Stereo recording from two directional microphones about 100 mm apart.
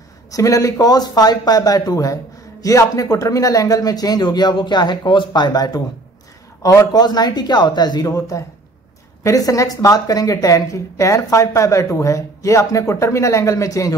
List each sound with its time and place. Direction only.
0.3 s speech: 35° left (ahead or behind)
8.1 s speech: 30° left (ahead or behind)